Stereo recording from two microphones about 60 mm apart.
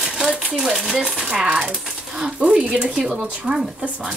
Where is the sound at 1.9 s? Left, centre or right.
Centre.